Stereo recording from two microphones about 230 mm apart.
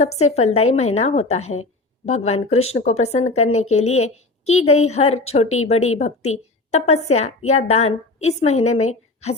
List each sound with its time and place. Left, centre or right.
0.2 s speech: left